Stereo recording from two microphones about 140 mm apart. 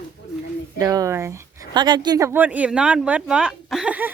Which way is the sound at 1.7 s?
30° right (ahead or behind).